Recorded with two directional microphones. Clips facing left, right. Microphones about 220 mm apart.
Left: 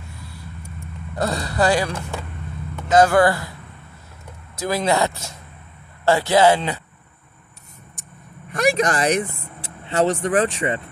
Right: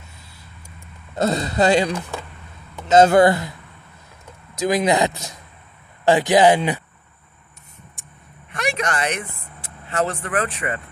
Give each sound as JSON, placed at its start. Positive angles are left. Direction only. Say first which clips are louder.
{"t": 1.1, "sound": "speech", "louder": "right 3 dB", "side_deg": -20}
{"t": 4.6, "sound": "speech", "louder": "right 2 dB", "side_deg": -15}
{"t": 8.5, "sound": "speech", "louder": "left 5 dB", "side_deg": 35}